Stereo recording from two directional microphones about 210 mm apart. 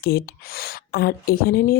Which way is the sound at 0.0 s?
45° left (ahead or behind).